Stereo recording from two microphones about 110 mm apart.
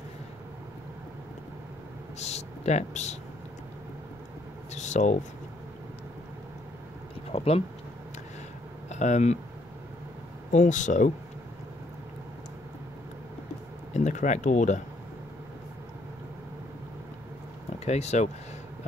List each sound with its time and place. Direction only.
2.1 s speech: 90° left
4.7 s a sound: 90° left
7.3 s speech: 65° left (ahead or behind)
8.8 s speech: 90° left
10.5 s speech: 90° left
13.9 s speech: 90° left
17.7 s speech: 85° left